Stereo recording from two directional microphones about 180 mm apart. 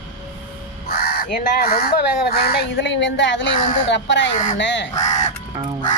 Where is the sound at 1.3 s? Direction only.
55° left (ahead or behind); by 4.9 s 90° left.